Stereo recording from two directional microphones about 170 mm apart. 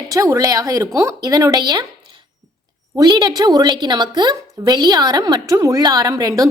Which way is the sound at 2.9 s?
25° right (ahead or behind).